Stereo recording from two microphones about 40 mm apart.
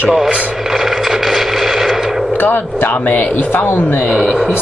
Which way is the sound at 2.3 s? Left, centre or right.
Left.